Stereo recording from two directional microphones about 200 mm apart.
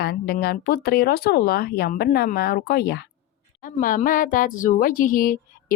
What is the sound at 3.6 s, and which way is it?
A woman's voice, 40° left (ahead or behind).